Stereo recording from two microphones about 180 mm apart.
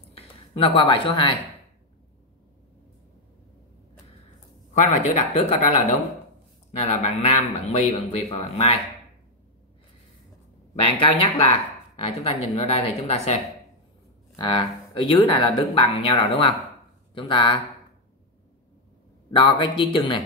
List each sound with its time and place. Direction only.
0.1 s speech: 30° left (ahead or behind)
4.7 s a man's voice: 40° left (ahead or behind)
11.0 s a man's voice: 30° left (ahead or behind)
14.4 s speech: 25° left (ahead or behind)
19.3 s speech: 25° left (ahead or behind)